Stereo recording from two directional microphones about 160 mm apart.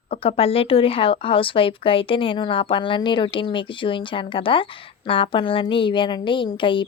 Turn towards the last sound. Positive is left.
turn(degrees=30)  # may be behind; listen again after turning